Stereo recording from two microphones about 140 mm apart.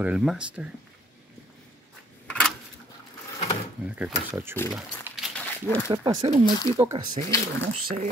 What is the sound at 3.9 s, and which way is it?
Speech, 10° right (ahead or behind).